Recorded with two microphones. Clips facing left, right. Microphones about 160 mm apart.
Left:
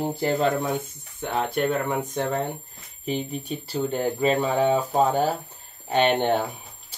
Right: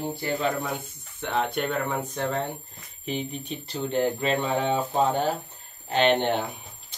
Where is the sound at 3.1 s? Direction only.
10° left (ahead or behind).